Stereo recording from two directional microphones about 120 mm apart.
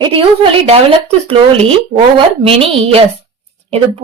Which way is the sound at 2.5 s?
55° right (ahead or behind).